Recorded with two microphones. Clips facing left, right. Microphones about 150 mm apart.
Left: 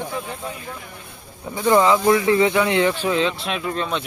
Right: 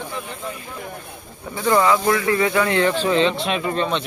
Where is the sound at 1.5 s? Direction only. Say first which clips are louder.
Left 1 dB; 20° left (ahead or behind).